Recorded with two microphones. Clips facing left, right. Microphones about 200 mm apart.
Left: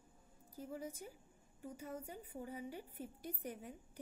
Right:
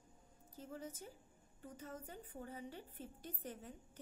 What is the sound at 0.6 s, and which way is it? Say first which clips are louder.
A woman's voice: left 3 dB; 10° left (ahead or behind).